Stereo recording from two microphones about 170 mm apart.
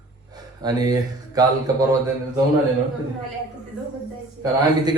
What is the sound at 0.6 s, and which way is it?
Speech, 20° right (ahead or behind).